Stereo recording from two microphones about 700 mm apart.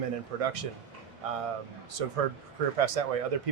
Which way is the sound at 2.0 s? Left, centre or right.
Right.